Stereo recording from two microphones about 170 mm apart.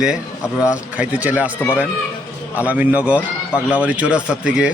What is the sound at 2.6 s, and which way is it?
Speech, 10° right (ahead or behind).